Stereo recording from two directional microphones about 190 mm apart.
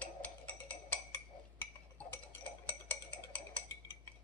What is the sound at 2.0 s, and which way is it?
Cutlery, 5° left (ahead or behind).